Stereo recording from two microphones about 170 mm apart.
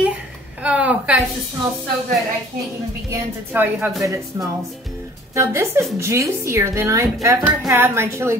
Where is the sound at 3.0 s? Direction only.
10° right (ahead or behind).